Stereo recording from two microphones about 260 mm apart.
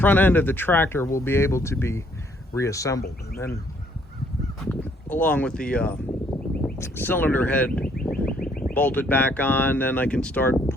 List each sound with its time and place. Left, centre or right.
0.0 s speech: centre
4.6 s speech: centre
7.9 s fowl: left
8.7 s speech: centre